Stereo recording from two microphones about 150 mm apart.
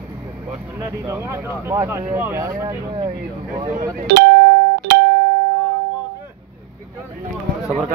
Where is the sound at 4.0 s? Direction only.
90° right.